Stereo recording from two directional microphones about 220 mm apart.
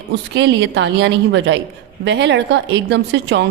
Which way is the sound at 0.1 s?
50° right (ahead or behind).